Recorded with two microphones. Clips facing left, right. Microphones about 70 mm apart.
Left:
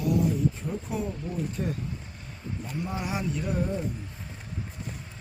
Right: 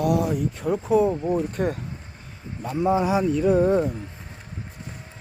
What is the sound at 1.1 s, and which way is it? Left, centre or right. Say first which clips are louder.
Speech: right 12 dB; right.